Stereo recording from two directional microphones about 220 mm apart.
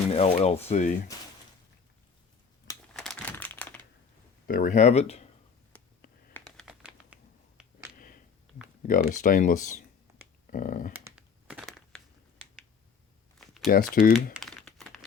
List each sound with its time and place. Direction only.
0.1 s speech: 30° left (ahead or behind)
2.9 s crumpling: centre (ahead or behind)
4.4 s speech: 40° left (ahead or behind)
6.3 s typing: centre (ahead or behind)
8.8 s speech: 35° left (ahead or behind)
10.9 s crumpling: 5° right (ahead or behind)
13.4 s a sound: centre (ahead or behind)
14.0 s speech: 45° left (ahead or behind)
14.4 s crumpling: centre (ahead or behind)